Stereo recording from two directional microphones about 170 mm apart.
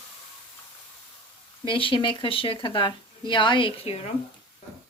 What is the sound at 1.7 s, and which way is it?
Speech, 30° left (ahead or behind).